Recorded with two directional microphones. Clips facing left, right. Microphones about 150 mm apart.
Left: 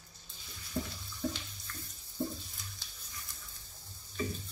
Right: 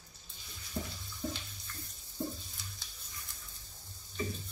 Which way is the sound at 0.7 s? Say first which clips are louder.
Left 3 dB; 10° right (ahead or behind).